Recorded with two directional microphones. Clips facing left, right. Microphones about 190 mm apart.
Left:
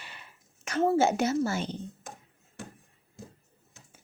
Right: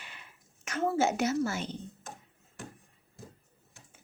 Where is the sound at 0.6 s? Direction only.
35° left (ahead or behind).